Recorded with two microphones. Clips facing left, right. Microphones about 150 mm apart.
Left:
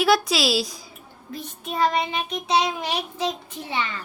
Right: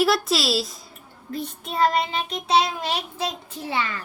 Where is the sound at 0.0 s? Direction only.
Centre (ahead or behind).